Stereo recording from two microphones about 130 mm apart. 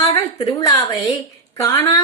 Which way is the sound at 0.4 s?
30° left (ahead or behind).